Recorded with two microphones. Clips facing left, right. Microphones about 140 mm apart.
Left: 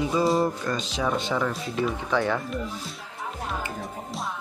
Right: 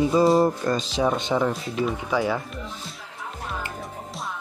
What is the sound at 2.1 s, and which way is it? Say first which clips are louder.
Speech: left 1 dB; 10° right (ahead or behind).